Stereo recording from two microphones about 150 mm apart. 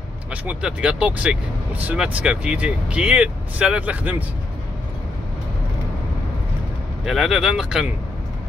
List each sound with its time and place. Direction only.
0.3 s speech: 5° right (ahead or behind)
7.1 s speech: centre (ahead or behind)